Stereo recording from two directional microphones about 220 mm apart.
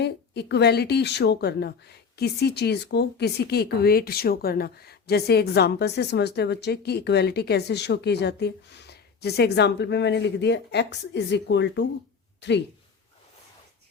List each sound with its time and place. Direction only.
0.0 s speech: 50° left (ahead or behind)